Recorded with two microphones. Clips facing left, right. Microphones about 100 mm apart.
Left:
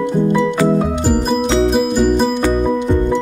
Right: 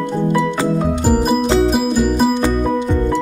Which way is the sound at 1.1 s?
5° right (ahead or behind).